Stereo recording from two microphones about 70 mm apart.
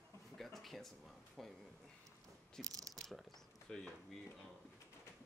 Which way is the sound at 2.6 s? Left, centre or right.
Right.